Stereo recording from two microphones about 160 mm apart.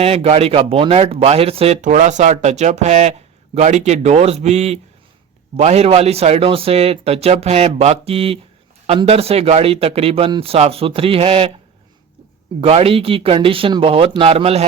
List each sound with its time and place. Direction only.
0.0 s speech: 40° right (ahead or behind)
12.5 s speech: 40° right (ahead or behind)